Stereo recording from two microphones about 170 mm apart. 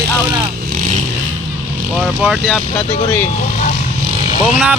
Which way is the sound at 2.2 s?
Centre (ahead or behind).